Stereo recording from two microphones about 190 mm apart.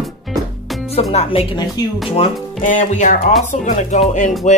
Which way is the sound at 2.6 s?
40° left (ahead or behind).